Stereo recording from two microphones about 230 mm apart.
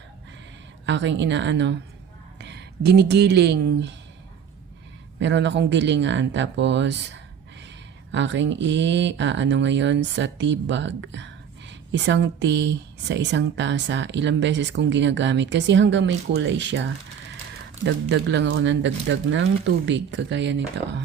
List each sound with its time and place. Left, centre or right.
0.9 s speech: right
5.2 s speech: right